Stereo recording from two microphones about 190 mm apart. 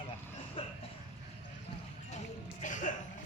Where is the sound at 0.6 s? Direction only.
30° left (ahead or behind).